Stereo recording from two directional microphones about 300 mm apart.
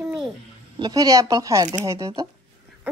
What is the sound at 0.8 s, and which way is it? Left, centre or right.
A woman's voice, centre.